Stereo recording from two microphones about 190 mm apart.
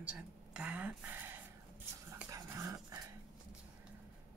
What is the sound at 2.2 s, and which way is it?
Dog, 15° right (ahead or behind).